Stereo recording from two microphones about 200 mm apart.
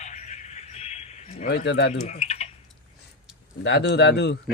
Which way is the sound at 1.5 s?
55° left (ahead or behind).